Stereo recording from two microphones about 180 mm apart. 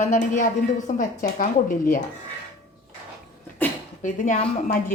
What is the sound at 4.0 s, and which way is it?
Speech, 45° left (ahead or behind).